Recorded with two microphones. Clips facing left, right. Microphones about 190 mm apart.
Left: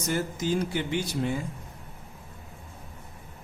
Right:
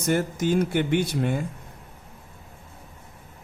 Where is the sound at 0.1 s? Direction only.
60° right (ahead or behind).